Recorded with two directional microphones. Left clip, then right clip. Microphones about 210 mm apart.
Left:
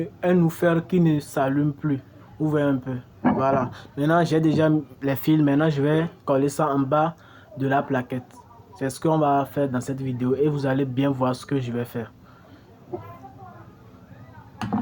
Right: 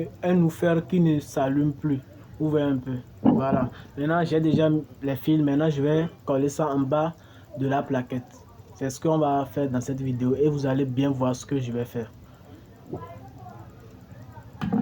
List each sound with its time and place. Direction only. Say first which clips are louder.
0.0 s speech: left 3 dB; 20° left (ahead or behind)